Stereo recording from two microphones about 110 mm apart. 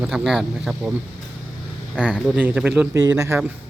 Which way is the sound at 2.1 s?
5° left (ahead or behind).